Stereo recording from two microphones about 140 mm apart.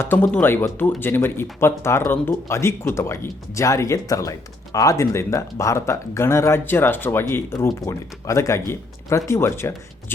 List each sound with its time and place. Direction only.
0.0 s speech: 15° left (ahead or behind)